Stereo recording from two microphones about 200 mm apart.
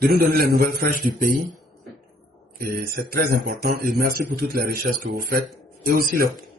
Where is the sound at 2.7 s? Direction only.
45° right (ahead or behind).